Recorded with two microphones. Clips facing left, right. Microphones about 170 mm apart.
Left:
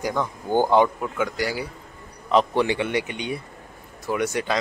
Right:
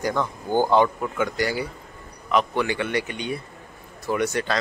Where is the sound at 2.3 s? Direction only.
30° left (ahead or behind).